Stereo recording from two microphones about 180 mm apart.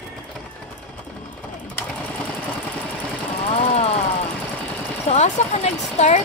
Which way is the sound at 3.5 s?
35° left (ahead or behind).